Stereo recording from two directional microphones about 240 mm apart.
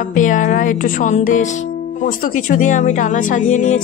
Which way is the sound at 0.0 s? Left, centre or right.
Left.